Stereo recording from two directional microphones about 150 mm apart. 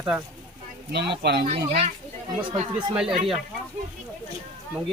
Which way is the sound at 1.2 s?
90° right.